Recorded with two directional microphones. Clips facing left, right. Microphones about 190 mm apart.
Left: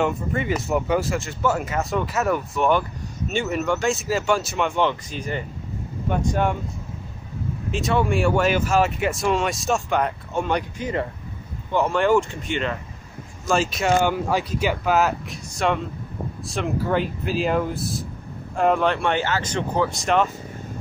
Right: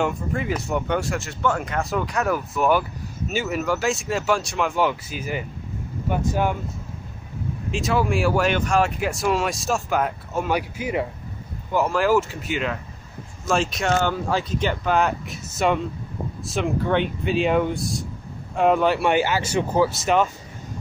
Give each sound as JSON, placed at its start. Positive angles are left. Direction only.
{"t": 0.0, "sound": "speech", "side_deg": 0}
{"t": 7.7, "sound": "speech", "side_deg": 0}
{"t": 13.9, "sound": "speech", "side_deg": 15}